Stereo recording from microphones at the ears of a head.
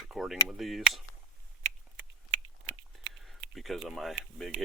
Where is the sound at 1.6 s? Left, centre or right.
Right.